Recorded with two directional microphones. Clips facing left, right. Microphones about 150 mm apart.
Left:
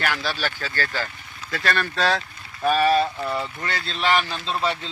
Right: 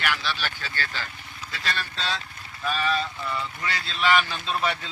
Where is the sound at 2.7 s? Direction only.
50° left (ahead or behind).